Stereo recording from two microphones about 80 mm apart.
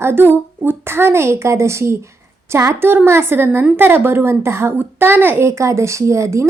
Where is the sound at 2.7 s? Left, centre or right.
Right.